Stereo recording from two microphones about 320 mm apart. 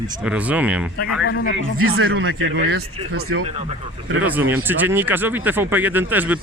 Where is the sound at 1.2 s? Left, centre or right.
Left.